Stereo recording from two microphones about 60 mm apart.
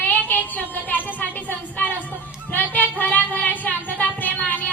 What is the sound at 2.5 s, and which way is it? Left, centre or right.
Music, left.